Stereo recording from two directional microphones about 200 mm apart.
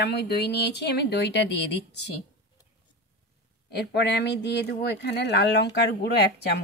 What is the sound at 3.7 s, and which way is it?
Speech, 60° left (ahead or behind).